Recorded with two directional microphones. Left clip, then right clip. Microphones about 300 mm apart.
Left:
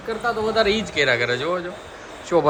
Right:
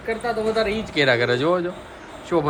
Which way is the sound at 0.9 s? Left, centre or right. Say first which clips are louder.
Right 1 dB; centre.